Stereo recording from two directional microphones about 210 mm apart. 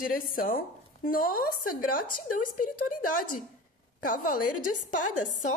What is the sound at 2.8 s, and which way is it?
Speech, 90° left.